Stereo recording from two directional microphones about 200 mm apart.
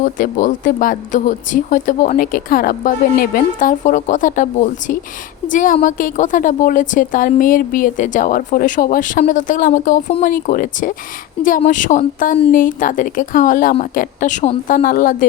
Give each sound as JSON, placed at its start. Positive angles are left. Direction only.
{"t": 0.0, "sound": "speech", "side_deg": 40}